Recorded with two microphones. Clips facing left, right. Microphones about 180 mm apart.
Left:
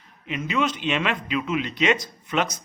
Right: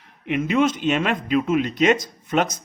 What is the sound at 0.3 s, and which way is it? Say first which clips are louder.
A man's voice: right 6 dB; 55° right (ahead or behind).